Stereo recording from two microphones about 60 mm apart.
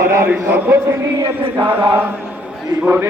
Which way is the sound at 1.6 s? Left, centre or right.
Right.